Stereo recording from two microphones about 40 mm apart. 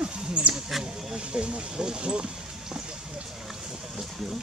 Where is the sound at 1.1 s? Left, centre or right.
Right.